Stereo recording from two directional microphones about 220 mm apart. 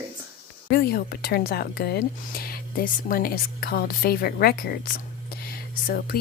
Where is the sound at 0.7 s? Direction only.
45° left (ahead or behind).